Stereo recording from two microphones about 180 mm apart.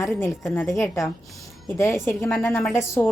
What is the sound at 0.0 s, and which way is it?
Speech, 15° left (ahead or behind).